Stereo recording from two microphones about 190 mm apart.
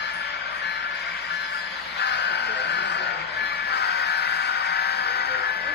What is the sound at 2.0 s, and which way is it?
Crow, 60° left (ahead or behind).